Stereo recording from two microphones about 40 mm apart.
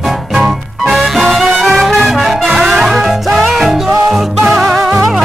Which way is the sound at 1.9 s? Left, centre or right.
Centre.